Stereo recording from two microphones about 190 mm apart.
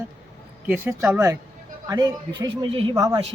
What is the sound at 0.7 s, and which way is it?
Speech, 10° right (ahead or behind).